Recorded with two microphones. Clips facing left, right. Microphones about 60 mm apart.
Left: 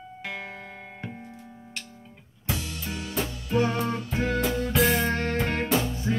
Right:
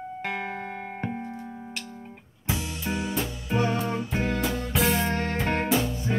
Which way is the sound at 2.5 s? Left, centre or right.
Right.